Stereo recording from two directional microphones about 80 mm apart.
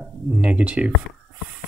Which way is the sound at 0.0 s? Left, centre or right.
Centre.